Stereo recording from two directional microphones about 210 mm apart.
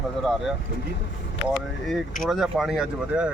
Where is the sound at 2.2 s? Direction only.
Centre (ahead or behind).